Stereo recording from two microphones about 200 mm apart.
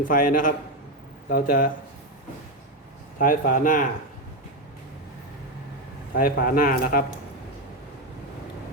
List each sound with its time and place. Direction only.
0.1 s speech: 40° left (ahead or behind)
3.2 s speech: 45° left (ahead or behind)
6.1 s speech: 45° left (ahead or behind)